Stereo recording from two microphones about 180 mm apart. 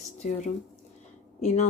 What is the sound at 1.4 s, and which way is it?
Speech, 40° left (ahead or behind).